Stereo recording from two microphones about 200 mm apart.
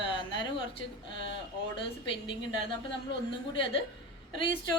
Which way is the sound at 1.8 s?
25° left (ahead or behind).